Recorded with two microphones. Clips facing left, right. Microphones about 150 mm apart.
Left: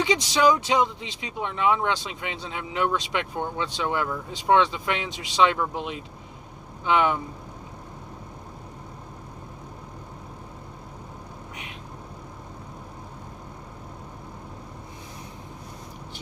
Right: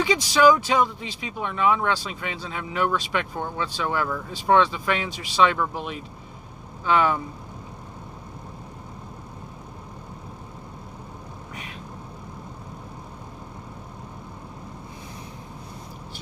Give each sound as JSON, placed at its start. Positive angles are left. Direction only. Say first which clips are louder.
{"t": 0.0, "sound": "speech", "louder": "right 3 dB", "side_deg": 20}